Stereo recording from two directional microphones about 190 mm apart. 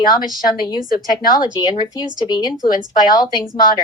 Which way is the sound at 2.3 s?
20° left (ahead or behind).